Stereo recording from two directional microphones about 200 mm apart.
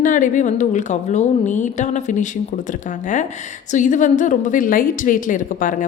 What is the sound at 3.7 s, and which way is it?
A woman's voice, 40° left (ahead or behind).